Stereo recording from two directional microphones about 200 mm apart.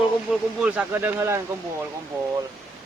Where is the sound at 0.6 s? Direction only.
10° right (ahead or behind).